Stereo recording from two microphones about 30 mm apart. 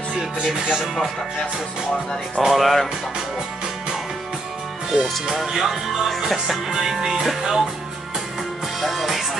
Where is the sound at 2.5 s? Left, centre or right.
Centre.